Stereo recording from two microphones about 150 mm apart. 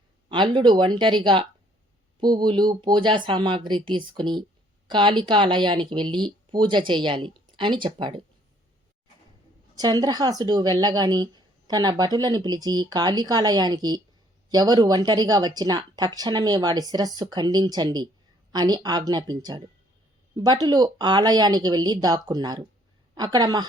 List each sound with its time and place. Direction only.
0.3 s speech: 30° right (ahead or behind)
9.7 s speech: 25° right (ahead or behind)